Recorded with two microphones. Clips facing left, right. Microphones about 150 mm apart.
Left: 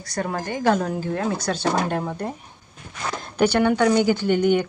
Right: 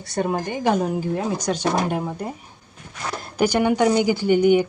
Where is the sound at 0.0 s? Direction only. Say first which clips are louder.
Right 3 dB; 20° right (ahead or behind).